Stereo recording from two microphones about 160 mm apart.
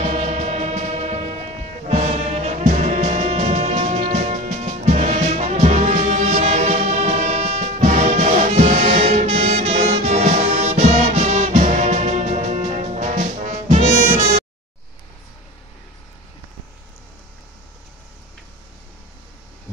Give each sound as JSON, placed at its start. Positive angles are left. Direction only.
{"t": 0.0, "sound": "music", "side_deg": -45}